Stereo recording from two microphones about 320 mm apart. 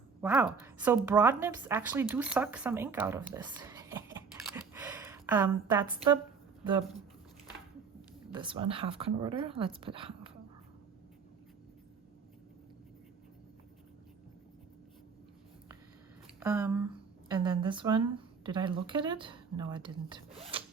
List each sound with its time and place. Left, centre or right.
0.2 s a woman's voice: centre
4.4 s a sound: centre
8.3 s a woman's voice: centre
16.4 s a woman's voice: centre